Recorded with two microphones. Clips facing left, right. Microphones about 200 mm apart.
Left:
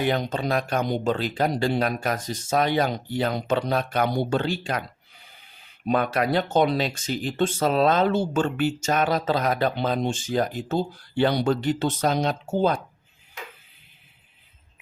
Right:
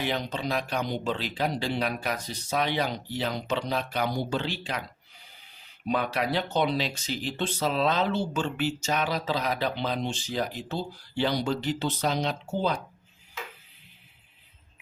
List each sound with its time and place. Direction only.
0.0 s speech: 50° left (ahead or behind)
5.8 s speech: 50° left (ahead or behind)